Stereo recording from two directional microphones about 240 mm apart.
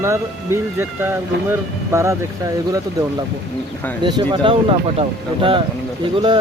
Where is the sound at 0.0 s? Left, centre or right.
Centre.